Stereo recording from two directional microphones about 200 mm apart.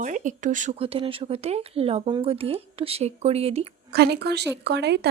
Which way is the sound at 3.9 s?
55° right (ahead or behind).